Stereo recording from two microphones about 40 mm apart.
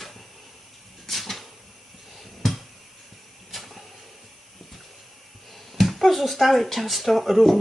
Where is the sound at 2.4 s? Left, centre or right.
Centre.